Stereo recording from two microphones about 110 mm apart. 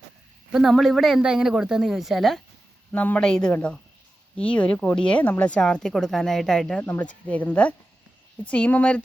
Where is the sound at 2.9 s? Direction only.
15° left (ahead or behind).